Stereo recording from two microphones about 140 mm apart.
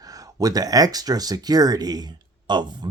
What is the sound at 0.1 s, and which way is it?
Speech, 25° right (ahead or behind).